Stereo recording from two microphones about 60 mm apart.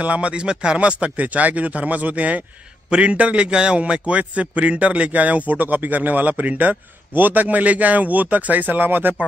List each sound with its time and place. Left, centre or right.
0.0 s a man's voice: right